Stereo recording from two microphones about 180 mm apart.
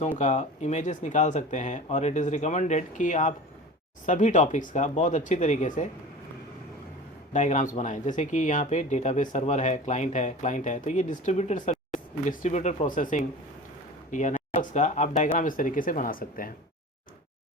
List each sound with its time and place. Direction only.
0.2 s speech: 40° left (ahead or behind)
7.3 s speech: 40° left (ahead or behind)